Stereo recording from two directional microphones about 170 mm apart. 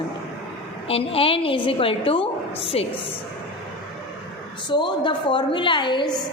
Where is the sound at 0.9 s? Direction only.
35° left (ahead or behind).